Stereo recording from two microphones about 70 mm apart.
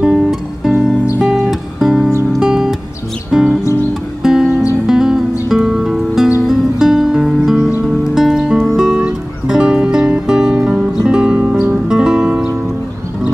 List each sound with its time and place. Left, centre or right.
0.0 s music: centre